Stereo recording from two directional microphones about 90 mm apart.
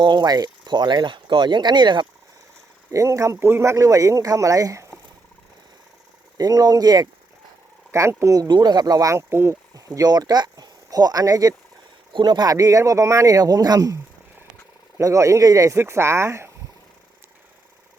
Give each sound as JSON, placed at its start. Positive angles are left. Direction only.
{"t": 0.0, "sound": "speech", "side_deg": -60}
{"t": 2.9, "sound": "speech", "side_deg": -35}
{"t": 6.3, "sound": "speech", "side_deg": -45}
{"t": 7.9, "sound": "speech", "side_deg": -35}
{"t": 8.4, "sound": "speech", "side_deg": -55}
{"t": 9.7, "sound": "speech", "side_deg": -45}